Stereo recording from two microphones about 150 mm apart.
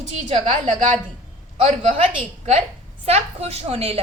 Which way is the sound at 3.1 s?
45° right (ahead or behind).